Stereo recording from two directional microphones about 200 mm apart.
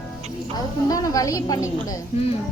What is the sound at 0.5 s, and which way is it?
A woman's voice, 15° left (ahead or behind).